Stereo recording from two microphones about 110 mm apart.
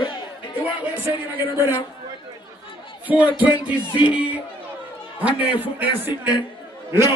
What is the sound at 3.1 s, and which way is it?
Music, 15° right (ahead or behind).